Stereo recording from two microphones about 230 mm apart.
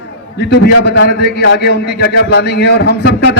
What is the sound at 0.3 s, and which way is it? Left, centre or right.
A man's voice, left.